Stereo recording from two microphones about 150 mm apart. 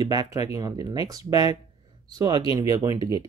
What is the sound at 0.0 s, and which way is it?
Speech, 25° right (ahead or behind).